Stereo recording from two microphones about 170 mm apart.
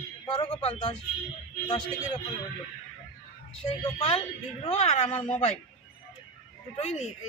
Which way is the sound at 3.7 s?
35° left (ahead or behind).